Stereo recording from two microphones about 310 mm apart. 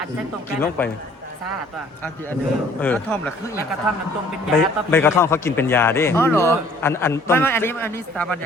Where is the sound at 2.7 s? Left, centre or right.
Centre.